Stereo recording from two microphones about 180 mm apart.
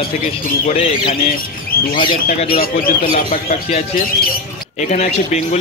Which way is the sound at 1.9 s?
50° left (ahead or behind).